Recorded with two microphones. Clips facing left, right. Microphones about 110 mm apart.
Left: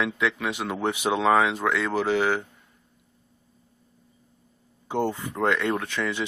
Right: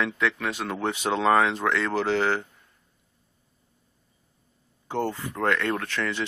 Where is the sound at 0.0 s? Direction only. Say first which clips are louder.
Left 1 dB; 10° left (ahead or behind).